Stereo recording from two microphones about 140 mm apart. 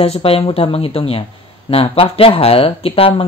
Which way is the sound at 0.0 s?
45° left (ahead or behind).